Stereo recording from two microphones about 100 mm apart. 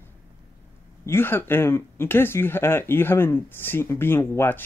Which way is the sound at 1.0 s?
25° left (ahead or behind).